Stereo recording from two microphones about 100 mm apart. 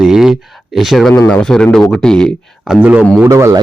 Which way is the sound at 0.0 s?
5° right (ahead or behind).